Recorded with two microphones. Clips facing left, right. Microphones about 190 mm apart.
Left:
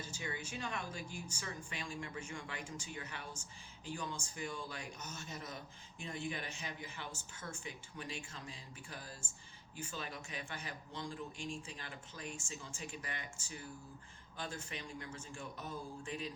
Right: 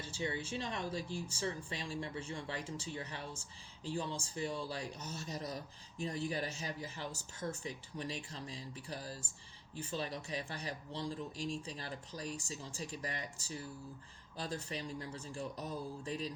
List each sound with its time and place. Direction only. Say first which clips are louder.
0.0 s speech: right 5 dB; 30° right (ahead or behind)